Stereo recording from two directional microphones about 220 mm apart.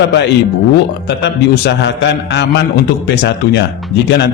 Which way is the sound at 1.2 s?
50° left (ahead or behind).